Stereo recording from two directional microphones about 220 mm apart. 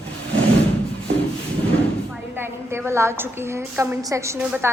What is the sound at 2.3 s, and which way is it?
A woman's voice, 10° right (ahead or behind).